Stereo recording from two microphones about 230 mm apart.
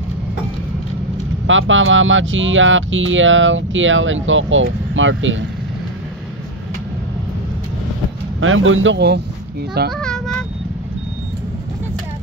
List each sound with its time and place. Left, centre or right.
1.5 s speech: right
8.4 s speech: right
9.9 s vehicle: centre